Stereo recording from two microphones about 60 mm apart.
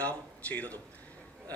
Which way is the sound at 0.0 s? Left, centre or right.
Left.